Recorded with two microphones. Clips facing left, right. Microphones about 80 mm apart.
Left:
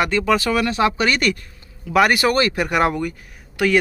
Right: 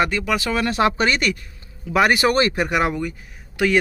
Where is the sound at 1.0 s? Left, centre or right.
Right.